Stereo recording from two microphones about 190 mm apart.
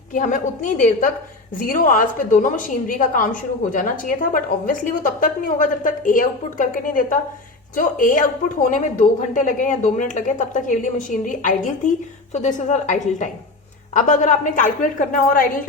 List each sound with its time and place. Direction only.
0.1 s a woman's voice: 40° left (ahead or behind)